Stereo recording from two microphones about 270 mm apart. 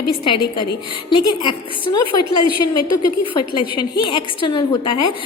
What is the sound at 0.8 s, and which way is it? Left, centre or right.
Speech, centre.